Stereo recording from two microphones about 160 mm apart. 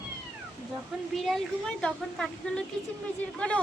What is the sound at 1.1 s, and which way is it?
A woman's voice, centre (ahead or behind).